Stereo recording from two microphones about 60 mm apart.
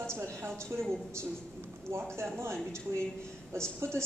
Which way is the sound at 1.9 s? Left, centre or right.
Right.